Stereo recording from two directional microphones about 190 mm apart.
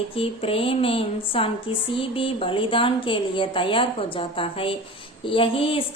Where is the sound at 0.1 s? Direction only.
30° left (ahead or behind).